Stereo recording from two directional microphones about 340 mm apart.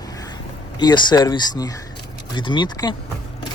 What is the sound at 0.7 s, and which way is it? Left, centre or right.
Speech, centre.